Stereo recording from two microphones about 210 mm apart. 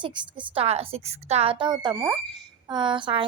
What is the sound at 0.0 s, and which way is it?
Speech, 20° right (ahead or behind).